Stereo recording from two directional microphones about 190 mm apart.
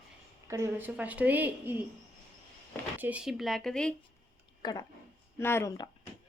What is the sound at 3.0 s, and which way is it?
Speech, 5° right (ahead or behind).